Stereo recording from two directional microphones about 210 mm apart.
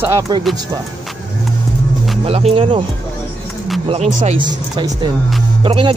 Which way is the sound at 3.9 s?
35° right (ahead or behind).